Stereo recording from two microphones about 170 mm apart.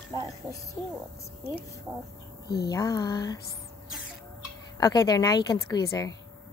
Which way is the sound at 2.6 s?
20° left (ahead or behind).